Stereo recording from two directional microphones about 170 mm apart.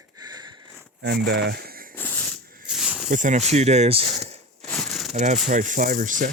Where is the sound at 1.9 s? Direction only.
10° left (ahead or behind).